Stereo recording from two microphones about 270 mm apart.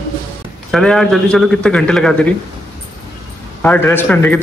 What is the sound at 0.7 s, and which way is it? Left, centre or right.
Speech, centre.